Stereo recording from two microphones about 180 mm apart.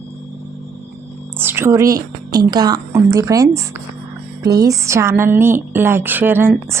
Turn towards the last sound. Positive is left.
turn(degrees=-10)  # may be behind; listen again after turning